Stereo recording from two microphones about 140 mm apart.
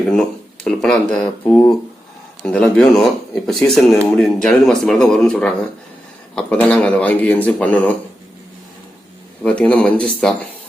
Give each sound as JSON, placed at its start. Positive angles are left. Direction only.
{"t": 0.1, "sound": "speech", "side_deg": 5}
{"t": 1.5, "sound": "speech", "side_deg": 20}
{"t": 2.4, "sound": "a man's voice", "side_deg": 5}
{"t": 9.4, "sound": "a man's voice", "side_deg": 10}